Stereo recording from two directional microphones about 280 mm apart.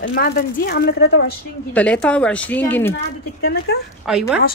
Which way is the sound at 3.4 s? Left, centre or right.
Left.